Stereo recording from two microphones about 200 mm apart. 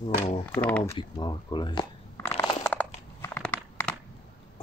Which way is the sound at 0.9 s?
20° left (ahead or behind).